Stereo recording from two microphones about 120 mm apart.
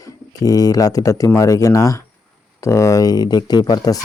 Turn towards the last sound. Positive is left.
turn(degrees=30)  # may be behind; listen again after turning